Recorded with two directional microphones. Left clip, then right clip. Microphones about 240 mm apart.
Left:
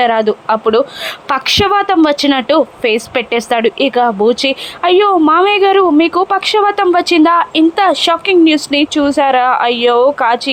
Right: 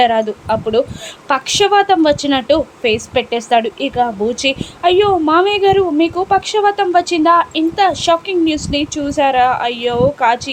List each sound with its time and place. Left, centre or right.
0.0 s a woman's voice: centre